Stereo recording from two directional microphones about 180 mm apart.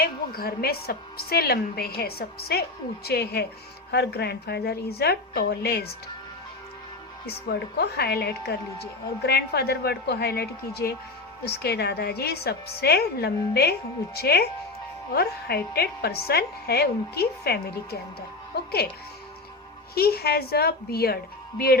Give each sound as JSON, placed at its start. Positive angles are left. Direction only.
{"t": 0.0, "sound": "a woman's voice", "side_deg": 55}
{"t": 7.3, "sound": "a woman's voice", "side_deg": 60}
{"t": 20.0, "sound": "a woman's voice", "side_deg": 60}